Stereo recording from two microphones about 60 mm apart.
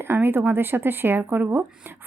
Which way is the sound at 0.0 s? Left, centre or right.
Right.